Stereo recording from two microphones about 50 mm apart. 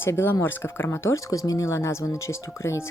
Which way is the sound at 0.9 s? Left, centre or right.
Left.